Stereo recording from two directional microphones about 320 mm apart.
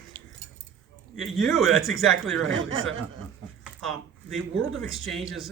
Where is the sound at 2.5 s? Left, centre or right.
Right.